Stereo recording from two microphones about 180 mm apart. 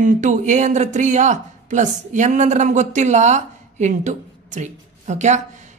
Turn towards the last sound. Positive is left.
turn(degrees=-40)  # may be behind; listen again after turning